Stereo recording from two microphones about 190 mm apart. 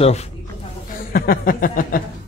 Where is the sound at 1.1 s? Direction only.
50° left (ahead or behind).